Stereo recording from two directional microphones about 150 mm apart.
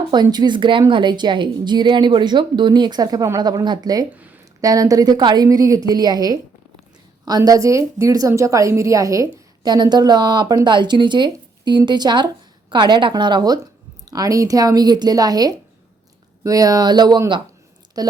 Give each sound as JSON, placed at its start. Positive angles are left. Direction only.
{"t": 0.1, "sound": "a woman's voice", "side_deg": -30}